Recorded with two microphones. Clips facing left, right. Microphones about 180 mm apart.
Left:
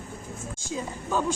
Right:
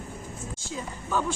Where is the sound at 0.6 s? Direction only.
15° left (ahead or behind).